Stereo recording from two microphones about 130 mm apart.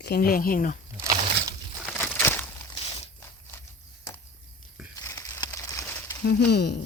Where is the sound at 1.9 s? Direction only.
15° left (ahead or behind).